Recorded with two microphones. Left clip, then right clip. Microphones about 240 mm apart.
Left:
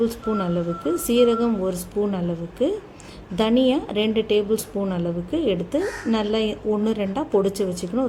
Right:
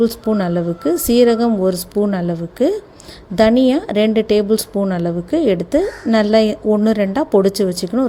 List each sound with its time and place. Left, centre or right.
0.0 s a woman's voice: right